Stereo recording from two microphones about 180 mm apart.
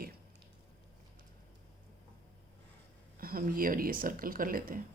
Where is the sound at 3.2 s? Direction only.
55° right (ahead or behind).